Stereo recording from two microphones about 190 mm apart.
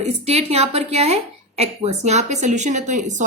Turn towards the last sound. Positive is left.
turn(degrees=-40)  # may be behind; listen again after turning